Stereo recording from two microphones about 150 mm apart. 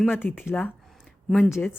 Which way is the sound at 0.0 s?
10° left (ahead or behind).